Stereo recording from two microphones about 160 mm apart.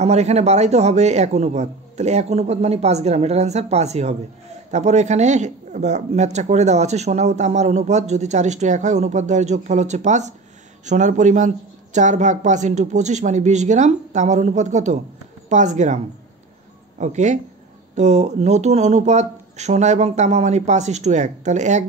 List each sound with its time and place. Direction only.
0.0 s speech: 45° right (ahead or behind)
17.0 s speech: 50° right (ahead or behind)